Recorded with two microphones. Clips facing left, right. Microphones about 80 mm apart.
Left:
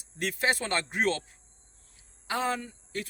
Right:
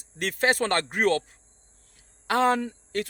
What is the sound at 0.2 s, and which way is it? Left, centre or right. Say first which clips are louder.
Speech: right 5 dB; right.